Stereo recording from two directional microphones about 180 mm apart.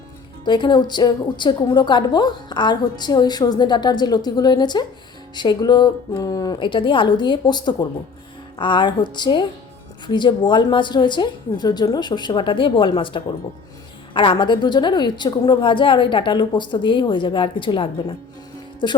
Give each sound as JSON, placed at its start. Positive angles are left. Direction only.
{"t": 0.4, "sound": "a woman's voice", "side_deg": 25}